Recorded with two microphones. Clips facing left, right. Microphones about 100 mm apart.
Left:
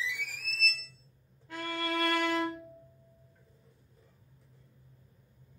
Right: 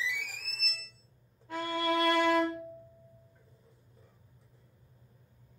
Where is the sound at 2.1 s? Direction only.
Centre (ahead or behind).